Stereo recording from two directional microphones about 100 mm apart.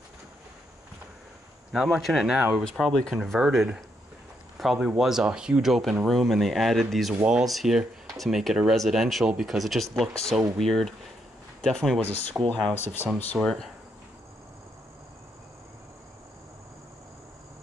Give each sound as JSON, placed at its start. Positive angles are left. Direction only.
{"t": 1.7, "sound": "speech", "side_deg": -5}
{"t": 12.4, "sound": "speech", "side_deg": -10}
{"t": 12.7, "sound": "speech", "side_deg": 20}
{"t": 13.4, "sound": "speech", "side_deg": 5}